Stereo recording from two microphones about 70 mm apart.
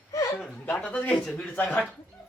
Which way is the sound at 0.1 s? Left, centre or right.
Left.